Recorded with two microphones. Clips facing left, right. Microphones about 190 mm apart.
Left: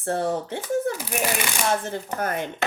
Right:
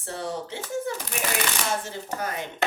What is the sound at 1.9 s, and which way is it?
Speech, 55° left (ahead or behind).